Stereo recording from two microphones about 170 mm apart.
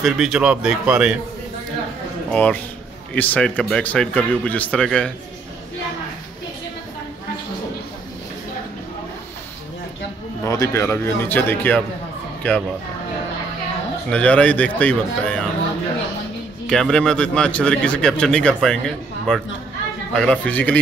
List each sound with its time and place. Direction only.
0.0 s speech: 5° right (ahead or behind)
2.3 s speech: 5° left (ahead or behind)
10.4 s speech: 15° left (ahead or behind)
14.1 s speech: 5° left (ahead or behind)
16.6 s speech: 5° left (ahead or behind)